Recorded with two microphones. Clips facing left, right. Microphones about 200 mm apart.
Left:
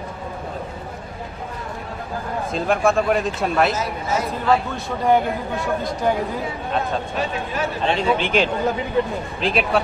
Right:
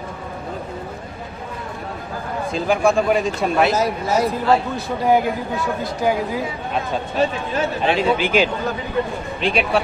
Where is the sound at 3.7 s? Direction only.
35° right (ahead or behind).